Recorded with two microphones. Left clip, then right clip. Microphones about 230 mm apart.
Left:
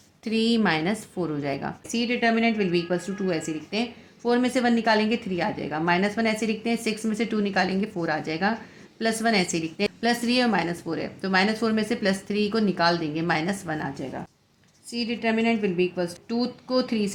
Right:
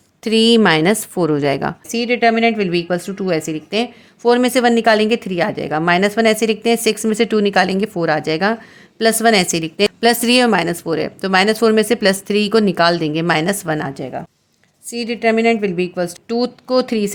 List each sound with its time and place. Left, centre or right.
0.3 s a woman's voice: right